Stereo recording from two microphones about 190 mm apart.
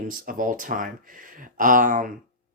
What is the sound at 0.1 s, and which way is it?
Speech, 45° right (ahead or behind).